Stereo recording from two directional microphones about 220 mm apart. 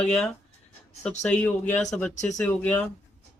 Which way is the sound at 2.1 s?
35° left (ahead or behind).